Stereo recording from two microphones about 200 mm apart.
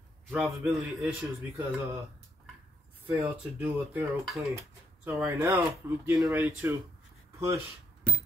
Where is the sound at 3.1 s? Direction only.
10° right (ahead or behind).